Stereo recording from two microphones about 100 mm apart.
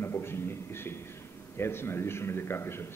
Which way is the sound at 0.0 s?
25° left (ahead or behind).